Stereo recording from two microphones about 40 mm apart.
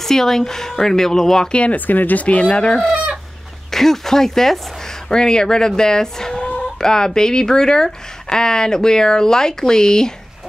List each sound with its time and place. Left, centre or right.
0.0 s speech: centre
1.5 s speech: left
1.9 s speech: left
2.2 s speech: left
3.7 s speech: centre